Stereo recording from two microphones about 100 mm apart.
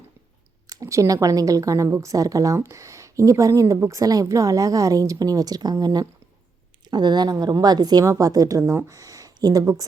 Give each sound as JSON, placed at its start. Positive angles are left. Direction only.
{"t": 0.7, "sound": "a woman's voice", "side_deg": -35}